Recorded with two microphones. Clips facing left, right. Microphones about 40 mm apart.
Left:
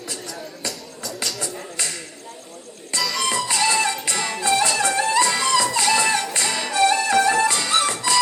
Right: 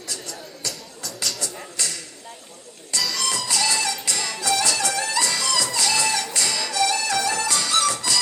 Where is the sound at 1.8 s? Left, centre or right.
Left.